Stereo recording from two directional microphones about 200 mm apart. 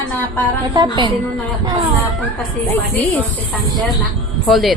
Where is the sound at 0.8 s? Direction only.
20° right (ahead or behind).